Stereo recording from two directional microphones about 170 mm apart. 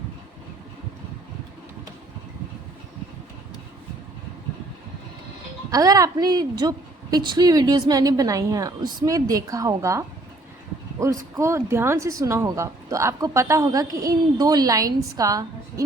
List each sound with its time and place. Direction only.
5.7 s speech: 20° right (ahead or behind)
11.0 s speech: 20° right (ahead or behind)